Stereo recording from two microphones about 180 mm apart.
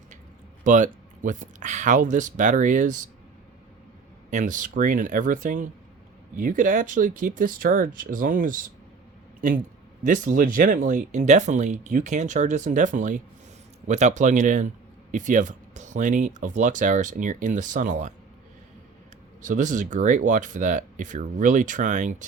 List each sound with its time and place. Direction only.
0.6 s speech: 45° right (ahead or behind)
4.3 s speech: 45° right (ahead or behind)
10.0 s speech: 45° right (ahead or behind)
19.4 s speech: 45° right (ahead or behind)